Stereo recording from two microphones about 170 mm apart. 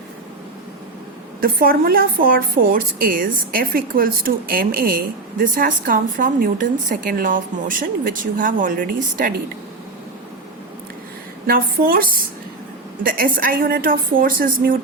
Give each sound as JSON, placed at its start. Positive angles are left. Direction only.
{"t": 1.4, "sound": "a woman's voice", "side_deg": -60}
{"t": 11.4, "sound": "a woman's voice", "side_deg": -60}